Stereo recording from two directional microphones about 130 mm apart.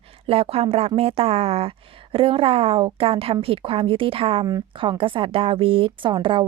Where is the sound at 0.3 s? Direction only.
50° right (ahead or behind).